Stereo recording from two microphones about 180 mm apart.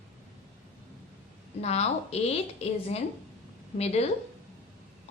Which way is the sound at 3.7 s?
35° left (ahead or behind).